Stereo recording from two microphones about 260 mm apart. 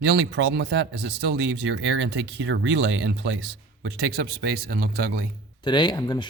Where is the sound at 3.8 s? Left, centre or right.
Right.